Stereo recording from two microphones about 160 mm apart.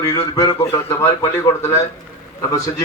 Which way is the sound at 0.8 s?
15° left (ahead or behind).